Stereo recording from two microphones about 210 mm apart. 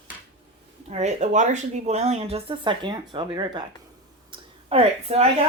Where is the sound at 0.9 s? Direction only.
35° right (ahead or behind).